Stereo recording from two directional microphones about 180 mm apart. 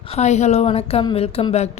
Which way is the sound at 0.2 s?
40° left (ahead or behind).